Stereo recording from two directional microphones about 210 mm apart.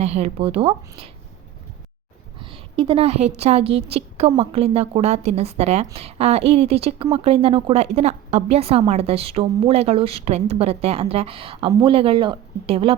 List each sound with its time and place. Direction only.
0.0 s a woman's voice: 30° right (ahead or behind)
2.4 s a woman's voice: 25° right (ahead or behind)